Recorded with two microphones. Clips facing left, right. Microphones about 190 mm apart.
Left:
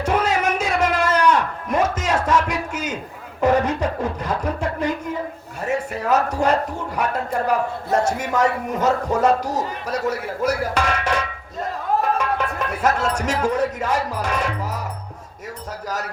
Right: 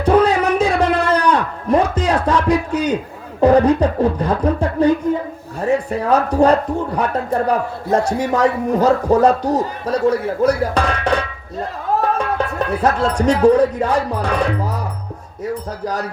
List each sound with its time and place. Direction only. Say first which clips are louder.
0.0 s a sound: right 7 dB; 35° right (ahead or behind)
3.4 s a man's voice: right 7 dB; 35° right (ahead or behind)
15.8 s a man's voice: right 3 dB; 35° right (ahead or behind)